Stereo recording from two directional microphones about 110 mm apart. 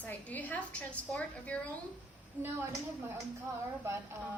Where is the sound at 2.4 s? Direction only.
20° right (ahead or behind).